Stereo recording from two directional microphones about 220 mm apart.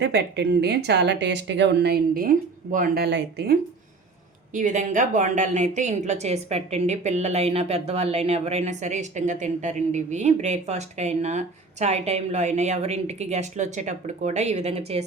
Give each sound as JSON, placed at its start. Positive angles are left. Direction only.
{"t": 0.0, "sound": "speech", "side_deg": -50}
{"t": 4.5, "sound": "a woman's voice", "side_deg": -35}